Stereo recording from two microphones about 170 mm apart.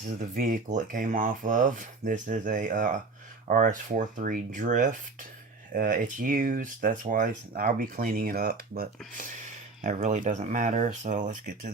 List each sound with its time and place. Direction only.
0.2 s speech: 55° right (ahead or behind)
9.8 s speech: 40° right (ahead or behind)